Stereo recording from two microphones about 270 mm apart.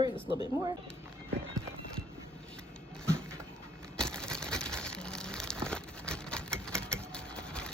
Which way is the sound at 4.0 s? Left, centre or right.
Centre.